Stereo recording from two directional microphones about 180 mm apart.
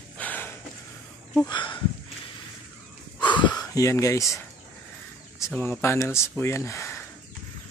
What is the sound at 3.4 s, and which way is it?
Speech, 20° left (ahead or behind).